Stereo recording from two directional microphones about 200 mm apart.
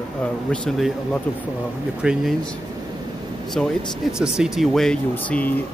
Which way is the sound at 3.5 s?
Centre (ahead or behind).